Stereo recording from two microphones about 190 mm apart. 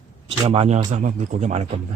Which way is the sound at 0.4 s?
35° right (ahead or behind).